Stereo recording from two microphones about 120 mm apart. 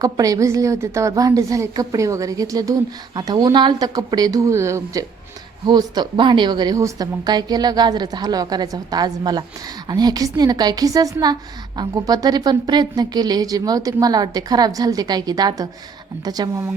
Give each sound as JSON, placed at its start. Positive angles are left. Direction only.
{"t": 0.0, "sound": "a woman's voice", "side_deg": -30}
{"t": 5.6, "sound": "a woman's voice", "side_deg": -35}